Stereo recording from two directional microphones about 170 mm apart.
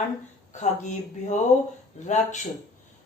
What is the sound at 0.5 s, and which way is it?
Speech, 45° left (ahead or behind).